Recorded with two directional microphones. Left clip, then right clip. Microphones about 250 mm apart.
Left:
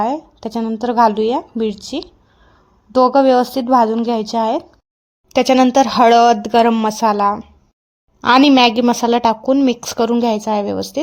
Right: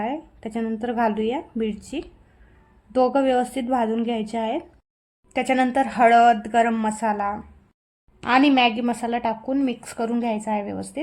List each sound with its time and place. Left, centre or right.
0.3 s a woman's voice: left
2.9 s a woman's voice: left